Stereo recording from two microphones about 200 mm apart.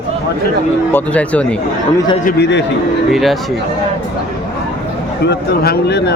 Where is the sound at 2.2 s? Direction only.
60° left (ahead or behind).